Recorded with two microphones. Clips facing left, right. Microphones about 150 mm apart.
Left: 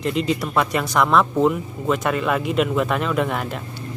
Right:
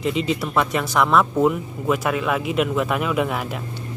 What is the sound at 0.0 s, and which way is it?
Speech, centre (ahead or behind).